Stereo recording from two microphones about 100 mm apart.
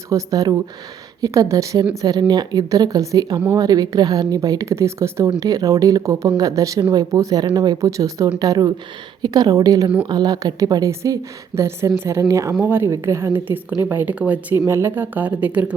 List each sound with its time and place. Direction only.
0.1 s a woman's voice: 35° right (ahead or behind); by 15.7 s 15° right (ahead or behind)